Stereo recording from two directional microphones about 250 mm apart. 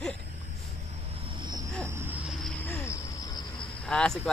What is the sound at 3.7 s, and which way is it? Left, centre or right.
Cricket, centre.